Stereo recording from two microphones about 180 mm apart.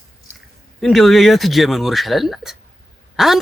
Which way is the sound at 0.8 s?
Centre (ahead or behind).